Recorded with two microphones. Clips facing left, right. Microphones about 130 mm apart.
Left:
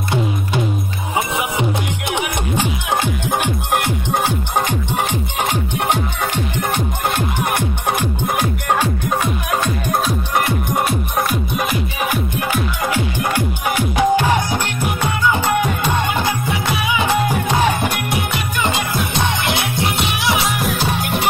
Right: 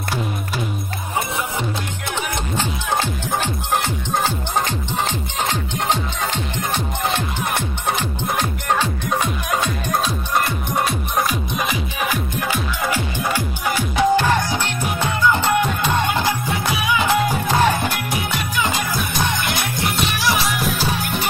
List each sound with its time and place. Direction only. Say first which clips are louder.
2.5 s music: left 2 dB; 15° left (ahead or behind)
8.0 s music: left 3 dB; 10° left (ahead or behind)
10.9 s music: left 2 dB; centre (ahead or behind)
13.9 s music: left 1 dB; 10° left (ahead or behind)
17.5 s music: left 1 dB; 15° left (ahead or behind)
19.4 s music: left 3 dB; 70° left (ahead or behind)